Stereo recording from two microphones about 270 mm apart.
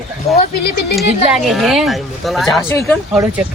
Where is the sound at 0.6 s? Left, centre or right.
Left.